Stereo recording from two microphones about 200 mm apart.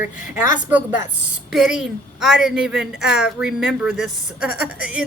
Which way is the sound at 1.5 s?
5° right (ahead or behind).